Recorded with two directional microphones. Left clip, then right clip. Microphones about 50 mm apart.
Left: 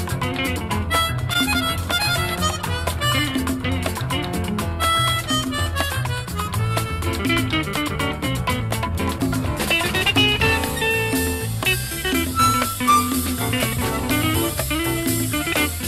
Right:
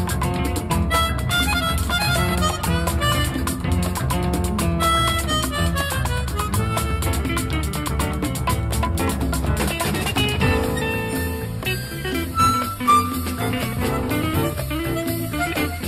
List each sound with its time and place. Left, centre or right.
0.9 s music: left
7.2 s music: left
9.6 s music: left
15.3 s music: left